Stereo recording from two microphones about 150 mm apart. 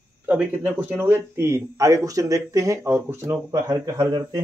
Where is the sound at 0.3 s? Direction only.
10° right (ahead or behind).